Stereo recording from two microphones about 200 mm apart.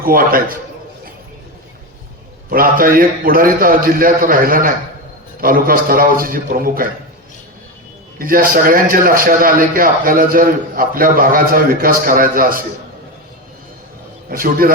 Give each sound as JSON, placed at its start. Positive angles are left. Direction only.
{"t": 0.0, "sound": "a man's voice", "side_deg": -45}
{"t": 2.5, "sound": "a man's voice", "side_deg": -45}
{"t": 8.2, "sound": "a man's voice", "side_deg": -45}
{"t": 14.3, "sound": "a man's voice", "side_deg": -45}